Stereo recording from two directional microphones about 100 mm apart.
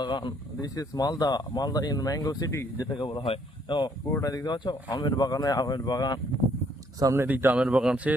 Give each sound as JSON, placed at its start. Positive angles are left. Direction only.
{"t": 0.0, "sound": "speech", "side_deg": 50}
{"t": 0.7, "sound": "speech", "side_deg": 40}
{"t": 4.2, "sound": "speech", "side_deg": 35}
{"t": 7.0, "sound": "speech", "side_deg": -30}
{"t": 7.3, "sound": "speech", "side_deg": -15}